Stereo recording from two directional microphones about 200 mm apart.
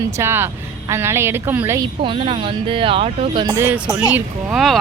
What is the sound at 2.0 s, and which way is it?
Speech, 25° right (ahead or behind).